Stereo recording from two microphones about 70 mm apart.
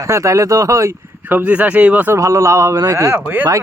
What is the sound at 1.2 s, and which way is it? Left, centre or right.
Speech, right.